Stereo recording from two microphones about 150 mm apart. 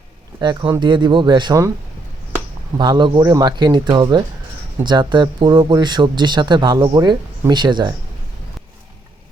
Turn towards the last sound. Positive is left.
turn(degrees=-30)  # may be behind; listen again after turning